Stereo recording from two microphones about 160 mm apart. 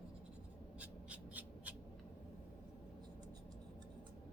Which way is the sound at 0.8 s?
10° right (ahead or behind).